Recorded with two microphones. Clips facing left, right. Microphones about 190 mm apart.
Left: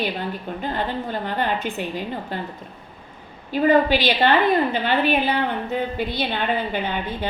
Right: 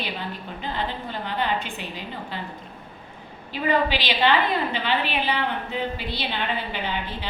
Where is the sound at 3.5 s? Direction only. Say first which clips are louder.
Left 6 dB; 45° left (ahead or behind).